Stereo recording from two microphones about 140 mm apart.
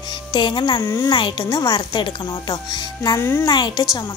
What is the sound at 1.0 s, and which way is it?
A woman's voice, 35° left (ahead or behind).